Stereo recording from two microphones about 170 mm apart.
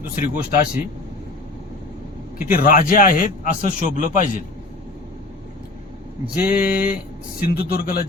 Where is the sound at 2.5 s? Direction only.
55° left (ahead or behind).